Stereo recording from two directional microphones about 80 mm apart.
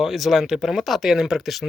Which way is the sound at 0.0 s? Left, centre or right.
Centre.